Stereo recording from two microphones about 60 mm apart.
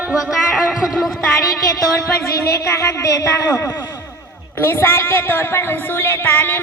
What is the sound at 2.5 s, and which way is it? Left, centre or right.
A woman's voice, left.